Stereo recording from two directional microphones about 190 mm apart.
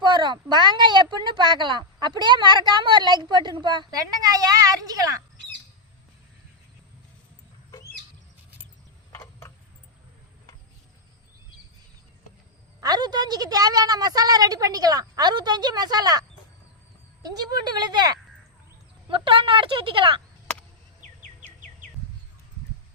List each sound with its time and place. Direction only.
0.0 s a woman's voice: 25° right (ahead or behind)
12.8 s a woman's voice: 20° right (ahead or behind)
17.2 s a woman's voice: 20° right (ahead or behind)